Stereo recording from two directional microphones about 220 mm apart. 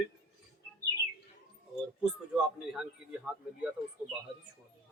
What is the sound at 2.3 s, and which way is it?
A man's voice, 5° right (ahead or behind).